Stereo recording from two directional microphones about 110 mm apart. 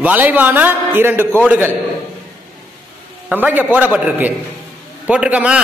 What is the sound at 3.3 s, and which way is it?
A man's voice, 15° right (ahead or behind).